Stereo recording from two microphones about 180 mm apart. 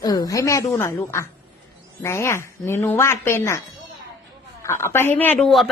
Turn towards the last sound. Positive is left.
turn(degrees=0)  # may be behind; listen again after turning